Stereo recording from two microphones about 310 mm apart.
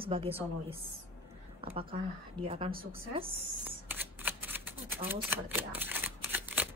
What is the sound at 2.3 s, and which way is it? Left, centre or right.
Speech, centre.